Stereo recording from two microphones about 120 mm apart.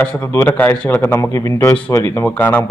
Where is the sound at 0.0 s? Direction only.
10° left (ahead or behind).